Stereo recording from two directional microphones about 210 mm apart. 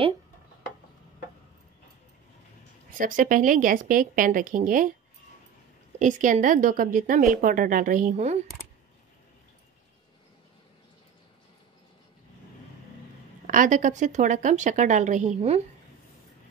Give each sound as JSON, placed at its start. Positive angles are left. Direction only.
{"t": 3.0, "sound": "a woman's voice", "side_deg": -40}
{"t": 5.9, "sound": "a woman's voice", "side_deg": -35}
{"t": 13.5, "sound": "a woman's voice", "side_deg": -40}